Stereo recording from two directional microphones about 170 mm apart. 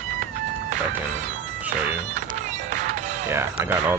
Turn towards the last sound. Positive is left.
turn(degrees=-10)  # may be behind; listen again after turning